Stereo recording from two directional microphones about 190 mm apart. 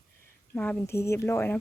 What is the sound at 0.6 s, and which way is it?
Speech, 10° left (ahead or behind).